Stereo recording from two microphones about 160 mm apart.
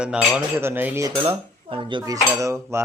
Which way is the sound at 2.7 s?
15° right (ahead or behind).